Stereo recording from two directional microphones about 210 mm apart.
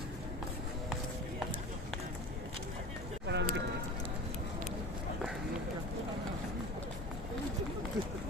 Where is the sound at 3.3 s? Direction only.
55° right (ahead or behind).